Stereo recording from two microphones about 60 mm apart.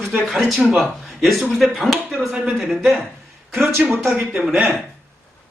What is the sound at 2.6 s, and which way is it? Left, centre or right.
Speech, centre.